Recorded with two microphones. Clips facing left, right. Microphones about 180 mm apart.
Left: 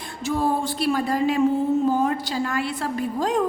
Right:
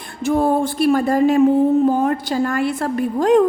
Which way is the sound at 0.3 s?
55° right (ahead or behind).